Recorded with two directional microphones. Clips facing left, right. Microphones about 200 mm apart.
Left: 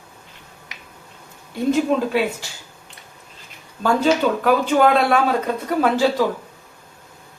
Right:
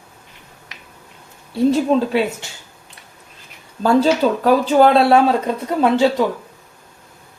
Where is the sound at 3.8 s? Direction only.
30° right (ahead or behind).